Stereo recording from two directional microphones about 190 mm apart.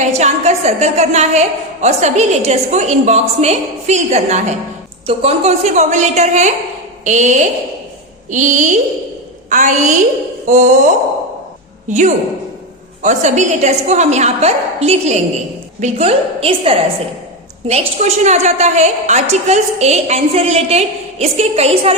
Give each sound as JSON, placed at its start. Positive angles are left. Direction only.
{"t": 0.0, "sound": "a woman's voice", "side_deg": -35}